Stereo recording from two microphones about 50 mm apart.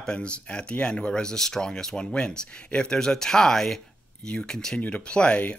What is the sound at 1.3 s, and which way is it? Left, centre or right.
Speech, centre.